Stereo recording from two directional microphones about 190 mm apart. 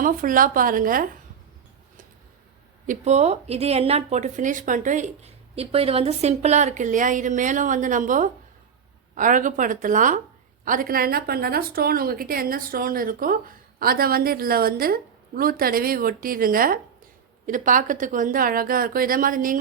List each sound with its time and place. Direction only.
0.0 s speech: 45° right (ahead or behind)
2.8 s speech: 40° right (ahead or behind)